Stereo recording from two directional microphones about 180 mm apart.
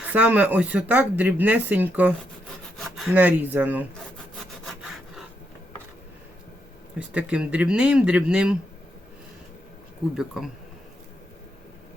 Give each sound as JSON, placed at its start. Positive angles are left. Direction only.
{"t": 0.0, "sound": "speech", "side_deg": -5}
{"t": 4.6, "sound": "wood", "side_deg": 0}
{"t": 7.1, "sound": "speech", "side_deg": -5}
{"t": 10.2, "sound": "speech", "side_deg": 0}